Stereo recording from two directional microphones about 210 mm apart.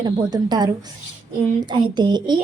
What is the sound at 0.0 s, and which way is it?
Speech, 20° right (ahead or behind).